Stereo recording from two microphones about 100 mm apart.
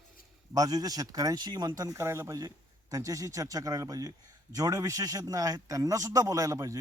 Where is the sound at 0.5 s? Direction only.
40° right (ahead or behind).